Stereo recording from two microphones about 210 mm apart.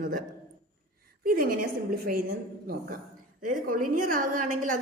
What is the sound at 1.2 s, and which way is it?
A woman's voice, 45° right (ahead or behind).